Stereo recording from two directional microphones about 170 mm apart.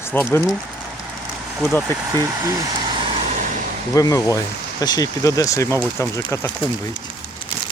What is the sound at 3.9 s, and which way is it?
Speech, 20° left (ahead or behind).